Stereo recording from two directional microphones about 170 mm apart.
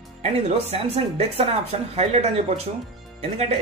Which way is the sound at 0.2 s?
35° right (ahead or behind).